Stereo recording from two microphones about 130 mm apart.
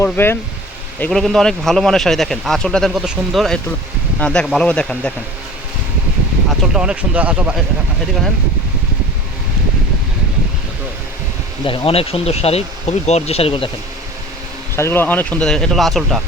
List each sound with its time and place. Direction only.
0.0 s speech: 15° left (ahead or behind)
1.1 s speech: 5° left (ahead or behind)
6.5 s speech: 5° right (ahead or behind)
11.6 s speech: 45° left (ahead or behind)
14.8 s speech: 20° left (ahead or behind); by 16.2 s centre (ahead or behind)